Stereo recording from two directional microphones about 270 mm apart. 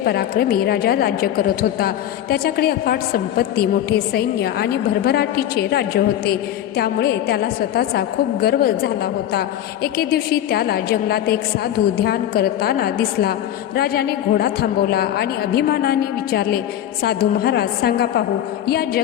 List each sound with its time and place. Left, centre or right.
0.0 s a woman's voice: left